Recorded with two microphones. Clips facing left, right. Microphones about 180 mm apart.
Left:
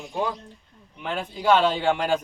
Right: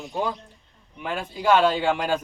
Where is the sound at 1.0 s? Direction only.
10° right (ahead or behind).